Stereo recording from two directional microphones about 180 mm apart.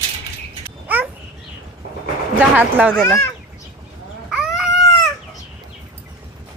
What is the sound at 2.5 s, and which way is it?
Speech, 10° right (ahead or behind).